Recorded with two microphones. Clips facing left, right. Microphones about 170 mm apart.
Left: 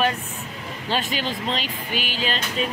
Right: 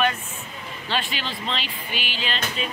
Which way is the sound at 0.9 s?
40° left (ahead or behind).